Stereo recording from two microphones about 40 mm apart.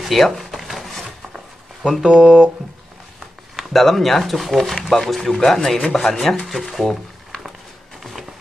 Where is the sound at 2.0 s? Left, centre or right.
Right.